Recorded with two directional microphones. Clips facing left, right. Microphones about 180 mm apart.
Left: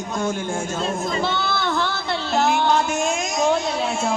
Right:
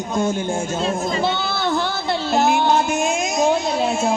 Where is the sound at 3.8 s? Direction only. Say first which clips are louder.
Right 4 dB; 40° right (ahead or behind).